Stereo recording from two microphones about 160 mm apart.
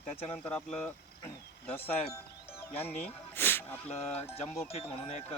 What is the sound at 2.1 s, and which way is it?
Music, 15° left (ahead or behind).